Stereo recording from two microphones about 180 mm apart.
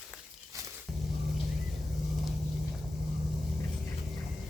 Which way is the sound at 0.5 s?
15° right (ahead or behind).